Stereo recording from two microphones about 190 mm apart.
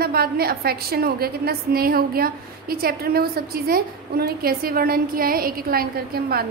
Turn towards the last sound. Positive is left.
turn(degrees=-55)  # may be behind; listen again after turning